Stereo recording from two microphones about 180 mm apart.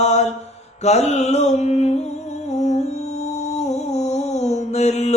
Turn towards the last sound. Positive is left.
turn(degrees=40)  # may be behind; listen again after turning